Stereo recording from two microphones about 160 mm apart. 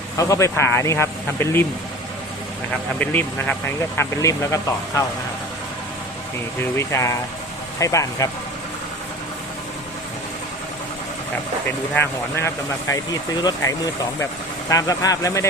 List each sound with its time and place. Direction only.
0.2 s speech: 20° left (ahead or behind)
3.0 s speech: 10° left (ahead or behind)
6.6 s speech: 15° left (ahead or behind)
11.9 s speech: 15° left (ahead or behind)